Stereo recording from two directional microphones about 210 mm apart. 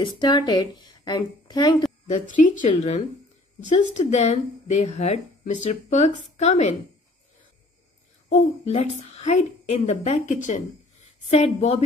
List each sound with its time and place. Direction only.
0.0 s a woman's voice: 20° left (ahead or behind)
2.0 s speech: 35° left (ahead or behind)
8.3 s speech: 30° left (ahead or behind)